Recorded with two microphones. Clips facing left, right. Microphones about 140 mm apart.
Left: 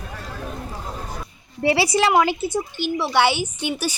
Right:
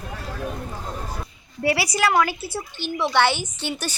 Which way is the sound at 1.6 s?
25° left (ahead or behind).